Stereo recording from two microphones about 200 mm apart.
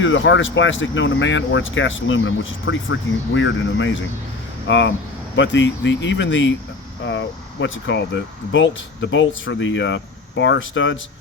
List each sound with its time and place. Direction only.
0.0 s speech: 70° left (ahead or behind)